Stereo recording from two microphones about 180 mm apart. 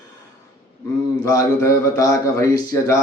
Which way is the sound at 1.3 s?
20° left (ahead or behind).